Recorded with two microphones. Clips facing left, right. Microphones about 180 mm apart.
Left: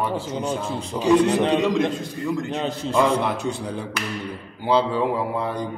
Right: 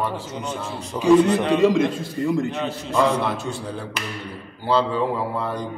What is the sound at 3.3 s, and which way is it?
A man's voice, 15° left (ahead or behind).